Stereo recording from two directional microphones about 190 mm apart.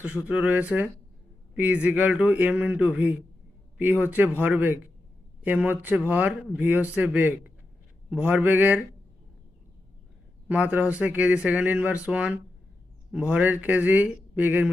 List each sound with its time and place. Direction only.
0.0 s speech: 5° right (ahead or behind)
10.5 s speech: 5° right (ahead or behind)